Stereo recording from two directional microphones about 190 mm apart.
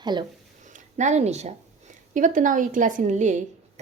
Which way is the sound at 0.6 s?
40° right (ahead or behind).